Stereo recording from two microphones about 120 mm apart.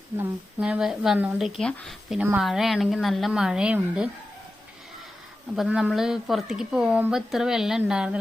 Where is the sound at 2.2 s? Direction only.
10° right (ahead or behind).